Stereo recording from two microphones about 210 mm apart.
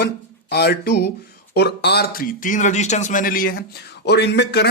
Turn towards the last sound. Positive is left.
turn(degrees=50)  # may be behind; listen again after turning